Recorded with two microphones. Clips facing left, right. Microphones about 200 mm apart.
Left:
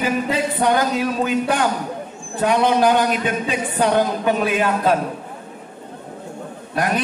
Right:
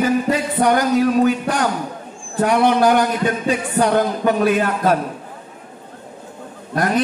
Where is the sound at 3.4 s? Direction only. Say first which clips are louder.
Right 3 dB; 40° right (ahead or behind).